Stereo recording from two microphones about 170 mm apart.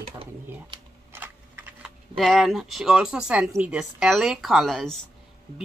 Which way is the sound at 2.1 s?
Centre (ahead or behind).